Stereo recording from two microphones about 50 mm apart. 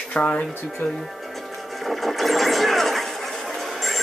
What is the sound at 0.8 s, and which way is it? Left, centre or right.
Speech, left.